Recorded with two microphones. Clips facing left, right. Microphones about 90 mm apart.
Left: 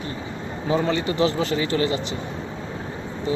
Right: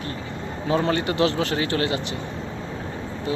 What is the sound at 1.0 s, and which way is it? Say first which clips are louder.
Speech: even; 65° right (ahead or behind).